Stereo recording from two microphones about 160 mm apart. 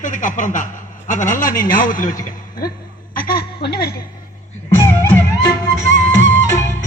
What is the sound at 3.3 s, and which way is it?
Speech, 80° left.